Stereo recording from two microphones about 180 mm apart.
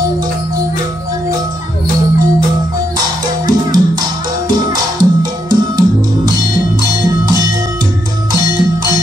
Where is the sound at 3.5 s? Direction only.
20° right (ahead or behind).